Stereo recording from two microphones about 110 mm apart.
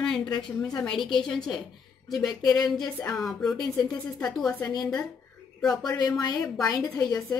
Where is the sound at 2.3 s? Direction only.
35° left (ahead or behind).